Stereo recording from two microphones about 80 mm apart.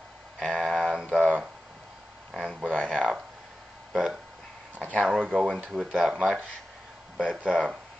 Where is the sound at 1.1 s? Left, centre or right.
Centre.